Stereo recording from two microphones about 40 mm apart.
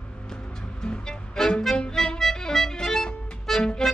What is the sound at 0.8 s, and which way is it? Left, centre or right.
Music, left.